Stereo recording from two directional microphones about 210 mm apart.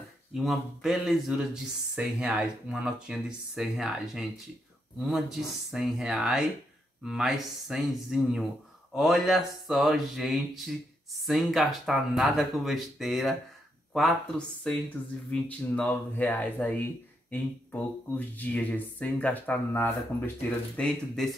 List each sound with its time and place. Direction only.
0.3 s speech: centre (ahead or behind)
14.6 s speech: 5° left (ahead or behind)